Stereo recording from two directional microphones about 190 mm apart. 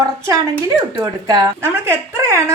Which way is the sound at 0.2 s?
15° right (ahead or behind).